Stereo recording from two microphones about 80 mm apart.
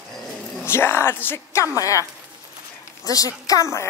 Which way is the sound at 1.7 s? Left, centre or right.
Left.